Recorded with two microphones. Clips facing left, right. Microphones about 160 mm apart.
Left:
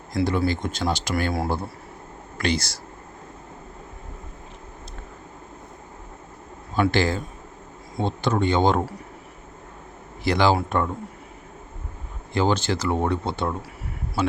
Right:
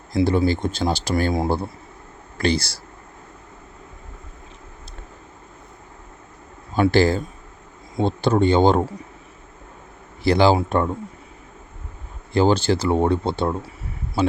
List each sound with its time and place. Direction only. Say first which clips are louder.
0.1 s speech: right 4 dB; 30° right (ahead or behind)
1.3 s speech: right 4 dB; 20° right (ahead or behind)
2.4 s speech: right 4 dB; 30° right (ahead or behind)
6.7 s speech: right 5 dB; 35° right (ahead or behind)
10.2 s speech: right 4 dB; 30° right (ahead or behind)
12.3 s speech: right 5 dB; 35° right (ahead or behind)